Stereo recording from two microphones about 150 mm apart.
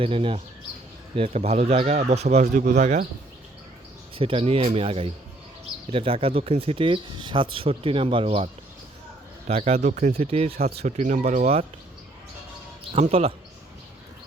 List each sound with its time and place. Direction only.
0.0 s speech: 35° right (ahead or behind)
4.2 s speech: 40° right (ahead or behind)
9.5 s speech: 45° right (ahead or behind)
12.9 s speech: 45° right (ahead or behind)